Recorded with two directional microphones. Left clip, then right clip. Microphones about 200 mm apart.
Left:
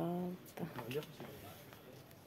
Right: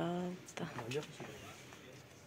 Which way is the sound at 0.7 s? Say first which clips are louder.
Right 1 dB; 25° right (ahead or behind).